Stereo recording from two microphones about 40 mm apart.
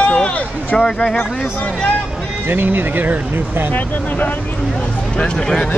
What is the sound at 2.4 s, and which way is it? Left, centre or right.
Speech, right.